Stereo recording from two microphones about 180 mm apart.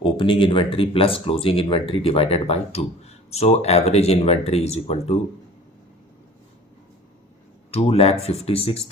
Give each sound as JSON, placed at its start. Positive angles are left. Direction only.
{"t": 0.0, "sound": "speech", "side_deg": 30}
{"t": 7.7, "sound": "speech", "side_deg": 35}